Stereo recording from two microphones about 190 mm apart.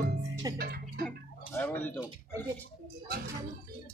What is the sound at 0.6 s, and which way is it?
Music, 55° right (ahead or behind).